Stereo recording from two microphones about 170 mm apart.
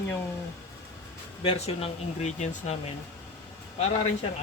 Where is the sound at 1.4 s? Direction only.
35° left (ahead or behind).